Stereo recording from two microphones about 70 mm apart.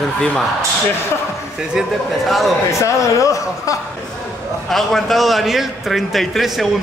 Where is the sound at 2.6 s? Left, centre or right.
Left.